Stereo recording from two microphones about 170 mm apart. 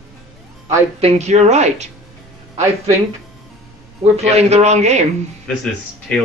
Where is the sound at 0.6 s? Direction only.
40° right (ahead or behind).